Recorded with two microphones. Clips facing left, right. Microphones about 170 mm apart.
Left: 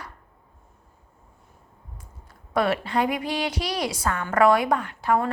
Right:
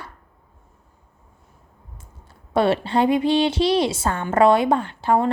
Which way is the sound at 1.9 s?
30° right (ahead or behind).